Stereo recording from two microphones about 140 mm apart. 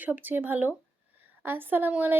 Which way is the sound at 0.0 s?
15° right (ahead or behind).